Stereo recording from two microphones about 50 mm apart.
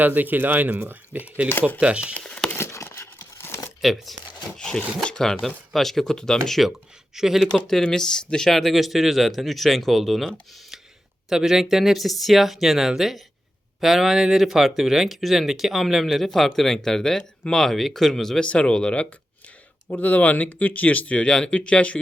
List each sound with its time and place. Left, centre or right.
0.0 s speech: right
1.8 s speech: right
2.1 s crumpling: left
2.9 s a sound: left
3.8 s speech: centre
4.5 s speech: centre
7.2 s speech: centre
7.7 s speech: centre
18.4 s speech: left
19.9 s speech: left